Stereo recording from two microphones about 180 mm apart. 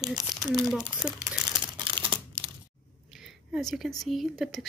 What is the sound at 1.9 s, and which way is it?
Crumpling, 25° right (ahead or behind).